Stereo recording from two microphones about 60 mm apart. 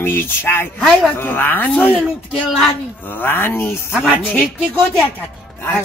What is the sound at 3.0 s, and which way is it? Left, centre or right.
Speech, left.